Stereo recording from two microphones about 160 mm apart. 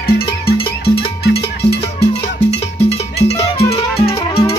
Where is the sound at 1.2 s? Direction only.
90° left.